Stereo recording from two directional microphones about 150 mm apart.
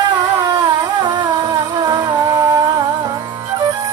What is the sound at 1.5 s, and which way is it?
Music, 25° right (ahead or behind).